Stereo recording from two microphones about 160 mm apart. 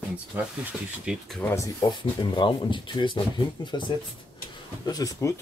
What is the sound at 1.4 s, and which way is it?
Speech, 15° left (ahead or behind).